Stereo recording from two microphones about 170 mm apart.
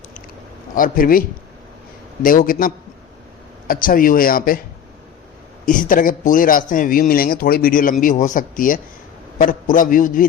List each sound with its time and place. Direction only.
0.8 s a man's voice: 55° left (ahead or behind)
2.2 s a man's voice: 55° left (ahead or behind)
5.6 s a man's voice: 55° left (ahead or behind)